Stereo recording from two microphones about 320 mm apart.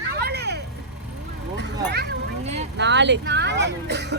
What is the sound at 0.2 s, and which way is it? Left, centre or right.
Vehicle, right.